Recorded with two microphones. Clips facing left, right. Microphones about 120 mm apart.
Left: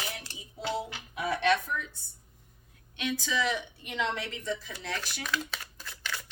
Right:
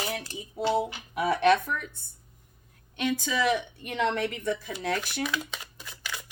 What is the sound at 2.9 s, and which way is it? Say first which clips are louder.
Speech: right 4 dB; 45° right (ahead or behind).